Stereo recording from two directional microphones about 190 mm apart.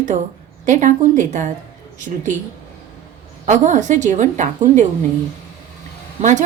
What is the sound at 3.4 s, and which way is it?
A woman's voice, 40° right (ahead or behind).